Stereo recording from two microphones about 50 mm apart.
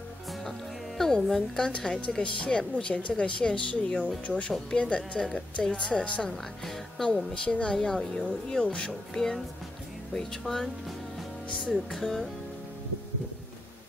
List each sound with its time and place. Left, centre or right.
0.3 s music: centre
2.0 s speech: left
6.2 s speech: centre
11.7 s music: centre